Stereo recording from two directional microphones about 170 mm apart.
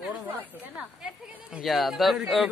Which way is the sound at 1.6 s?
Centre (ahead or behind).